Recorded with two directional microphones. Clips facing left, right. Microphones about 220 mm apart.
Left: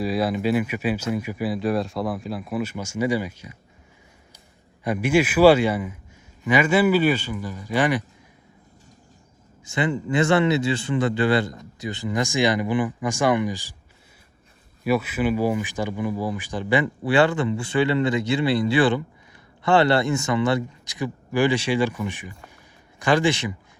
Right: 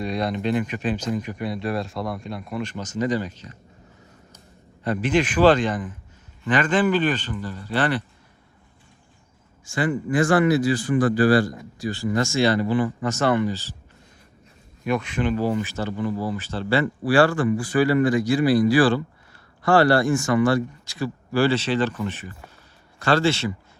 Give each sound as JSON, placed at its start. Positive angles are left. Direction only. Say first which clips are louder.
{"t": 0.0, "sound": "speech", "louder": "left 2 dB", "side_deg": 5}
{"t": 4.8, "sound": "speech", "louder": "left 1 dB", "side_deg": 10}
{"t": 9.6, "sound": "speech", "louder": "right 1 dB", "side_deg": 20}
{"t": 14.8, "sound": "speech", "louder": "left 2 dB", "side_deg": 5}